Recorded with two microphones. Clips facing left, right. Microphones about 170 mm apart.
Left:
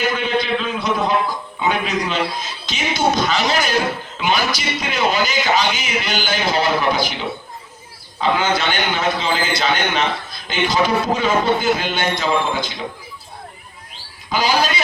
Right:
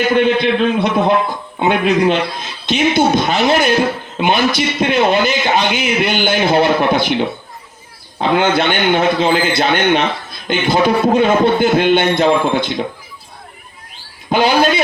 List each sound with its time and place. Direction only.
0.1 s a man's voice: 55° right (ahead or behind)
14.3 s a man's voice: 55° right (ahead or behind)